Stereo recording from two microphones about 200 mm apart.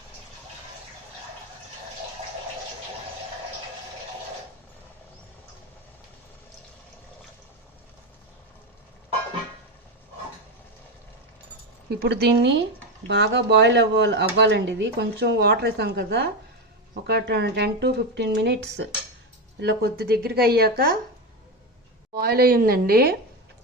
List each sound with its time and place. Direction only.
11.9 s speech: 55° right (ahead or behind)
22.1 s speech: 50° right (ahead or behind)